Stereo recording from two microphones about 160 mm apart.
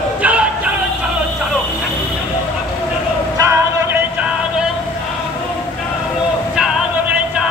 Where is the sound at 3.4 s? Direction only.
15° right (ahead or behind).